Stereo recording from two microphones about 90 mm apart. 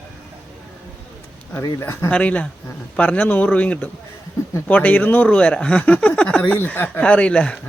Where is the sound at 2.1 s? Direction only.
15° left (ahead or behind).